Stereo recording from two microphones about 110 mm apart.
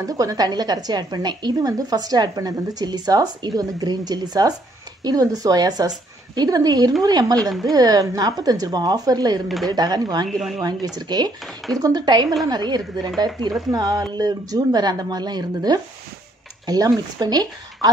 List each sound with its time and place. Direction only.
0.0 s a woman's voice: 30° right (ahead or behind)
10.2 s speech: centre (ahead or behind)
10.6 s a woman's voice: 35° right (ahead or behind)